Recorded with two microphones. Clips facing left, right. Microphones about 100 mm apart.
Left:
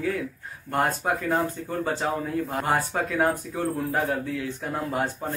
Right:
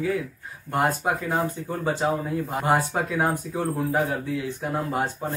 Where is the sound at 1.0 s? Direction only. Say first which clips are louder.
Right 1 dB; 15° right (ahead or behind).